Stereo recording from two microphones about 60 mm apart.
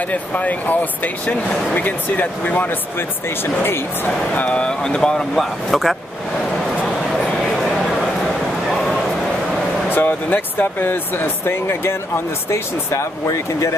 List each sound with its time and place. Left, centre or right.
0.1 s speech: left
4.4 s speech: centre
7.4 s a sound: centre
8.6 s bow-wow: centre
9.8 s speech: left